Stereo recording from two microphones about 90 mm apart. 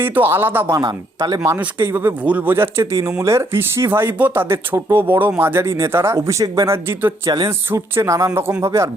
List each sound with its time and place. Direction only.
0.0 s speech: 20° right (ahead or behind)
0.9 s speech: 50° right (ahead or behind)
1.5 s speech: 25° right (ahead or behind)